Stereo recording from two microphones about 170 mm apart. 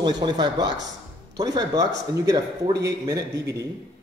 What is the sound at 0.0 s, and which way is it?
A man's voice, 25° right (ahead or behind).